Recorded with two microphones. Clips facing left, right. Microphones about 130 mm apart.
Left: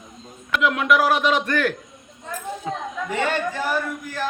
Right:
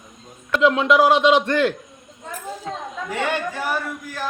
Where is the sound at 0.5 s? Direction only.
25° right (ahead or behind).